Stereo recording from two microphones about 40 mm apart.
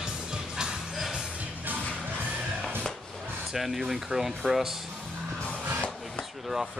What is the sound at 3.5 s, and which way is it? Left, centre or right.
Speech, centre.